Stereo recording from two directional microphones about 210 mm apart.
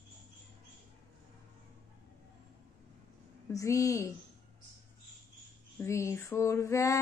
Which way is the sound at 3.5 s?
15° left (ahead or behind).